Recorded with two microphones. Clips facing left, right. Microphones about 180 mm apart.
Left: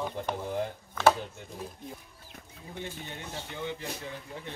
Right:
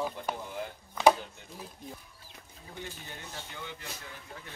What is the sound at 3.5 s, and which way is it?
Speech, 20° left (ahead or behind).